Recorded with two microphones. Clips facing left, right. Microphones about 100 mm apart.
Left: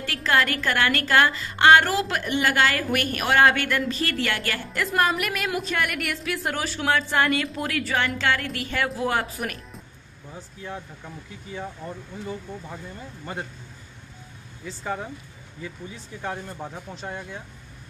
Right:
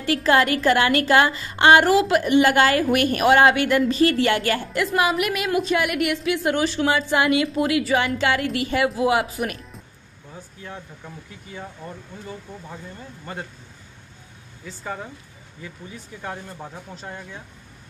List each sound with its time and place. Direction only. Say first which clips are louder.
0.0 s a woman's voice: right 5 dB; 20° right (ahead or behind)
4.7 s a woman's voice: even; 5° right (ahead or behind)
10.3 s speech: left 2 dB; 10° left (ahead or behind)
16.3 s a woman's voice: left 2 dB; centre (ahead or behind)